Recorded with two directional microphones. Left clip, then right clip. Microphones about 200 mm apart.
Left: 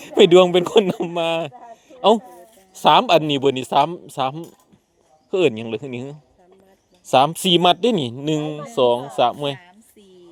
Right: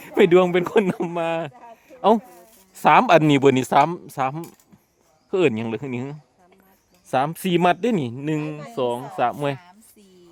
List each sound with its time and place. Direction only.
0.0 s a man's voice: 15° right (ahead or behind)
7.1 s speech: 5° right (ahead or behind)